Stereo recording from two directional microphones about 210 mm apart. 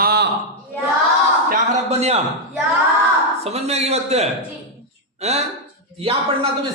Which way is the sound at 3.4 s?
30° right (ahead or behind).